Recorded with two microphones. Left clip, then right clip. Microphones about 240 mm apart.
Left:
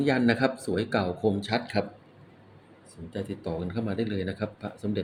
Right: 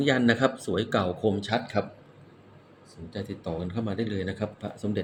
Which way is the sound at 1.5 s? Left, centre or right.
Centre.